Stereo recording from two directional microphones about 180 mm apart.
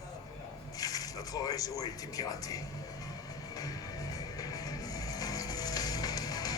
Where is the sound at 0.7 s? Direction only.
20° left (ahead or behind).